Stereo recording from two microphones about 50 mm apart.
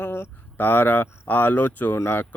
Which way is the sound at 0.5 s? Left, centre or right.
Left.